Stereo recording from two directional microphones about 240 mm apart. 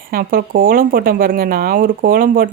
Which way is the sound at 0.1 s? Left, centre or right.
Right.